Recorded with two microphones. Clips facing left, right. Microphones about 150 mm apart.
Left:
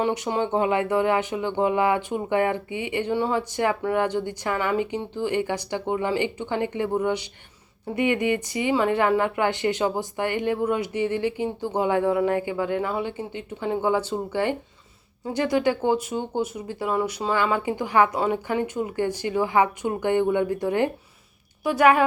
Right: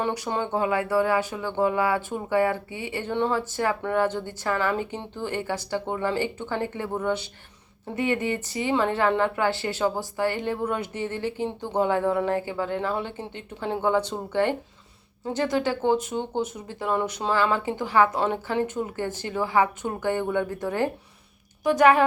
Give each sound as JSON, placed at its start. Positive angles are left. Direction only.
{"t": 0.0, "sound": "a woman's voice", "side_deg": 15}